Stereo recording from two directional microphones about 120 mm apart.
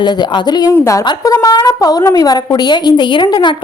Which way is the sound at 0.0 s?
35° left (ahead or behind).